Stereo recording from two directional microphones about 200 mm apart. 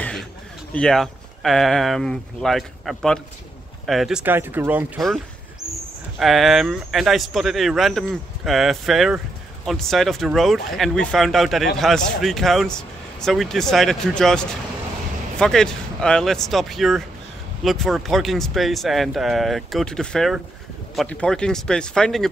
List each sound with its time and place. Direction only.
0.7 s speech: centre (ahead or behind)
6.1 s speech: centre (ahead or behind)